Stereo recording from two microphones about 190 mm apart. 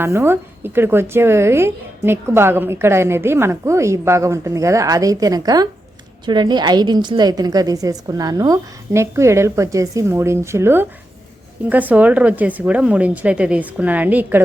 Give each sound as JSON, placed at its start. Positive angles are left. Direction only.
{"t": 0.0, "sound": "speech", "side_deg": -10}